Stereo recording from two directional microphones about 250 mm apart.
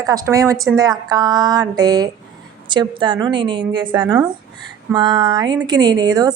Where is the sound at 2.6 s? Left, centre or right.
Centre.